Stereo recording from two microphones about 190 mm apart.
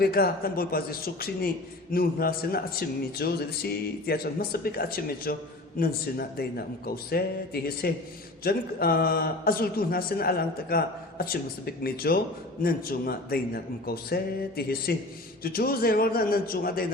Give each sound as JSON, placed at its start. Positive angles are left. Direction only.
{"t": 0.0, "sound": "a man's voice", "side_deg": 50}